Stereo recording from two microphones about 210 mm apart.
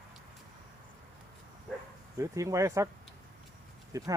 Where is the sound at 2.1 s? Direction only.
15° right (ahead or behind).